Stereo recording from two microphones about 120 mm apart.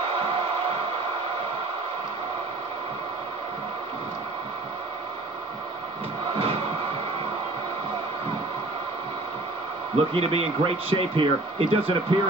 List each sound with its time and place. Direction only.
9.9 s speech: 55° right (ahead or behind)